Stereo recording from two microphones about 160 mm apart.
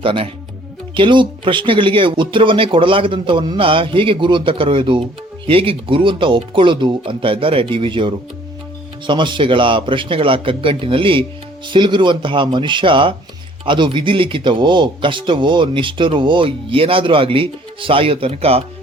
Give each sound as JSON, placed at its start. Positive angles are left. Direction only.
{"t": 0.0, "sound": "speech", "side_deg": -35}